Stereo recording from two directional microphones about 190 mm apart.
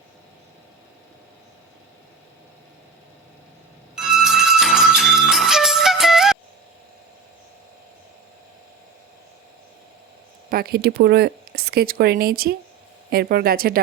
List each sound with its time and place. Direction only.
3.9 s music: 5° right (ahead or behind)
10.5 s speech: 55° right (ahead or behind)